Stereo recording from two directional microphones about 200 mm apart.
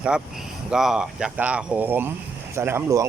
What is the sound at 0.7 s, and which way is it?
Speech, 5° right (ahead or behind).